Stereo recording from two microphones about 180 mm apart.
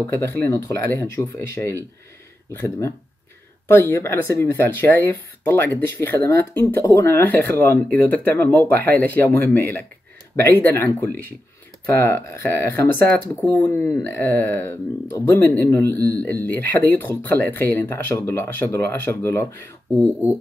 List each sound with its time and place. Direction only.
0.0 s speech: 20° left (ahead or behind)
3.6 s speech: 15° left (ahead or behind)
20.0 s speech: 10° right (ahead or behind)